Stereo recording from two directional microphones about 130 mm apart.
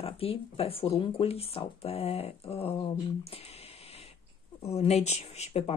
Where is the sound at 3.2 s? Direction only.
50° left (ahead or behind).